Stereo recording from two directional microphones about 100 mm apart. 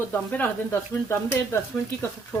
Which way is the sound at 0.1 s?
15° left (ahead or behind).